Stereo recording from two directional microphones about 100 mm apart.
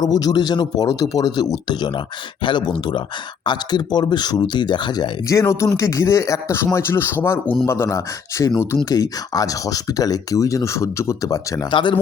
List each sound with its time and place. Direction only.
0.0 s speech: 40° left (ahead or behind)
5.3 s speech: 30° left (ahead or behind)
11.7 s speech: 50° left (ahead or behind)